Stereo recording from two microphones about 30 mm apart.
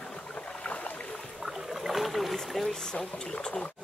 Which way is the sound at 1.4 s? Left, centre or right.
Centre.